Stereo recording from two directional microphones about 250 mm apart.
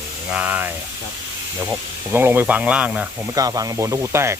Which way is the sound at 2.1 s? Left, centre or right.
Centre.